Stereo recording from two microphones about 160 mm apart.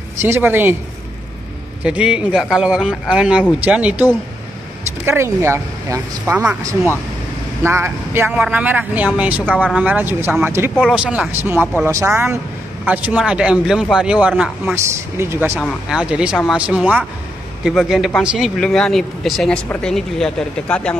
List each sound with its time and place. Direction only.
0.2 s a man's voice: 15° right (ahead or behind)
1.9 s a man's voice: 5° right (ahead or behind)
5.0 s a man's voice: 15° right (ahead or behind)
15.6 s a man's voice: 5° right (ahead or behind)